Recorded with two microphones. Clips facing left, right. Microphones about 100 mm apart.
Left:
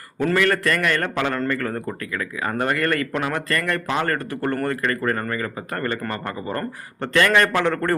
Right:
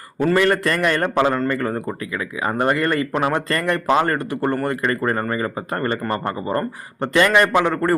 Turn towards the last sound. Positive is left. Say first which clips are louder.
# right 3 dB
turn(degrees=-10)  # may be behind; listen again after turning